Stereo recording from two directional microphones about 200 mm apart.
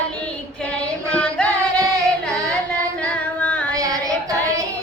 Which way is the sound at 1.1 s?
5° left (ahead or behind).